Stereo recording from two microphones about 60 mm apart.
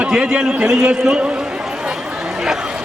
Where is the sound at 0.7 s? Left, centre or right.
Centre.